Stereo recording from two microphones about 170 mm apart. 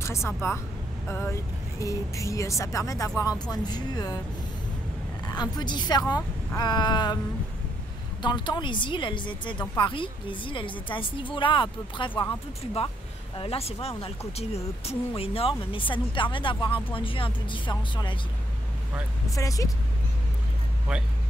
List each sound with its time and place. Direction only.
0.0 s a woman's voice: 15° left (ahead or behind)
5.2 s a woman's voice: 25° left (ahead or behind)
8.2 s a woman's voice: 25° left (ahead or behind)
19.3 s a woman's voice: 20° left (ahead or behind)
20.9 s speech: 5° right (ahead or behind)